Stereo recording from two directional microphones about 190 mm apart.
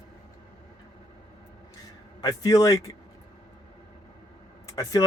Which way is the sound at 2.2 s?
20° left (ahead or behind).